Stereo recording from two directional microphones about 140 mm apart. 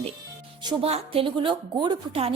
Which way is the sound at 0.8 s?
45° right (ahead or behind).